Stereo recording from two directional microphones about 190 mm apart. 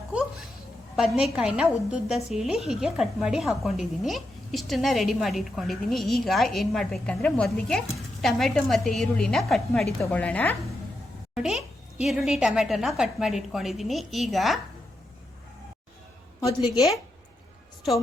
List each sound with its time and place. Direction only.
0.9 s a woman's voice: 5° right (ahead or behind)
11.3 s a woman's voice: 5° right (ahead or behind)
16.4 s a woman's voice: 20° left (ahead or behind)